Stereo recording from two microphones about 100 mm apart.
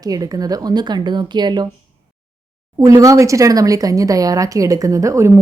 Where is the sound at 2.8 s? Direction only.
35° right (ahead or behind).